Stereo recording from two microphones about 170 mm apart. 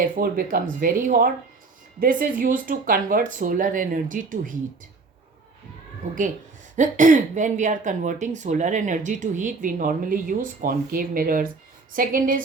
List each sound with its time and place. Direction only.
0.0 s a woman's voice: 55° right (ahead or behind)
6.7 s a woman's voice: 45° right (ahead or behind)